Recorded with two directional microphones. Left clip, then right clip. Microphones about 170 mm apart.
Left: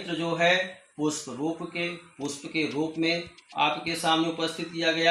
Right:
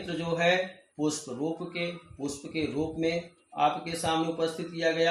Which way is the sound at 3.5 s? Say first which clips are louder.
Left 1 dB; 5° right (ahead or behind).